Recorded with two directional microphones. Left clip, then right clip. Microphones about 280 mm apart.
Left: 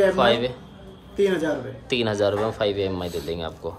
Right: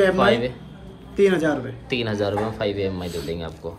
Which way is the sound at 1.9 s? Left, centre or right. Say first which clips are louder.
Left 2 dB; centre.